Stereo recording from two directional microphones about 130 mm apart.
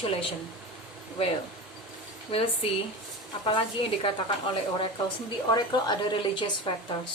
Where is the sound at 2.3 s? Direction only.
45° left (ahead or behind).